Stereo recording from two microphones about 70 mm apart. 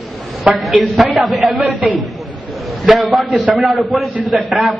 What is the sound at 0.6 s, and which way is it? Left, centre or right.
A man's voice, centre.